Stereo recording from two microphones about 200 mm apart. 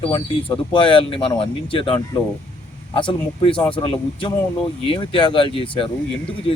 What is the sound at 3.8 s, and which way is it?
Speech, 25° left (ahead or behind).